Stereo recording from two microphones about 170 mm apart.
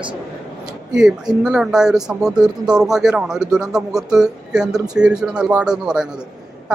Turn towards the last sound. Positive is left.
turn(degrees=-5)  # may be behind; listen again after turning